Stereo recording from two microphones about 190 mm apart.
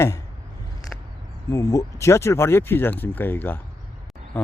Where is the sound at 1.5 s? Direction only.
15° left (ahead or behind).